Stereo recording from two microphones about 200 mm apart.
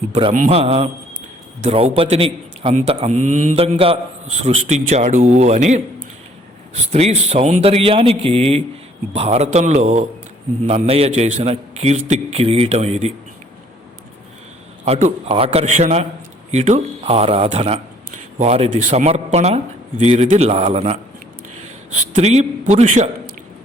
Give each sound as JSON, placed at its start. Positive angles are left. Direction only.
{"t": 0.3, "sound": "a man's voice", "side_deg": -40}
{"t": 0.6, "sound": "a man's voice", "side_deg": -30}
{"t": 14.8, "sound": "a man's voice", "side_deg": -30}